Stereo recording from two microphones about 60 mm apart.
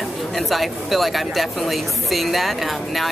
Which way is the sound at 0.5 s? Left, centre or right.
Centre.